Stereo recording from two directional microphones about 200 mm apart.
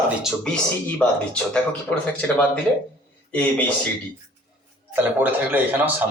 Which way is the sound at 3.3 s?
5° left (ahead or behind).